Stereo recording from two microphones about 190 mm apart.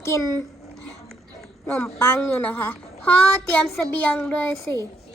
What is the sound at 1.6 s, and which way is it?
A woman's voice, 10° left (ahead or behind).